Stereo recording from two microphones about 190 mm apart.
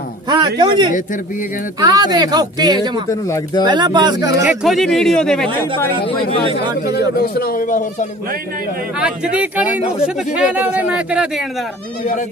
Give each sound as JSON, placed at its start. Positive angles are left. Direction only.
{"t": 0.3, "sound": "speech", "side_deg": -25}
{"t": 3.1, "sound": "speech", "side_deg": 15}
{"t": 3.6, "sound": "speech", "side_deg": -25}
{"t": 4.5, "sound": "speech", "side_deg": 0}
{"t": 7.2, "sound": "speech", "side_deg": 55}
{"t": 9.0, "sound": "a man's voice", "side_deg": -5}
{"t": 12.0, "sound": "speech", "side_deg": 45}